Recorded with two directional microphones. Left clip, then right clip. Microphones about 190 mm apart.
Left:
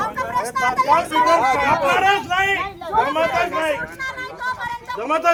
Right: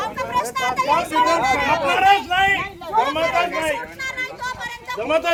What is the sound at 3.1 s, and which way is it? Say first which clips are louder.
Speech: left 1 dB; 15° left (ahead or behind).